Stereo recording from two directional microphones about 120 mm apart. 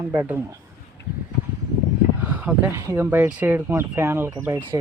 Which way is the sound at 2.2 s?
10° right (ahead or behind).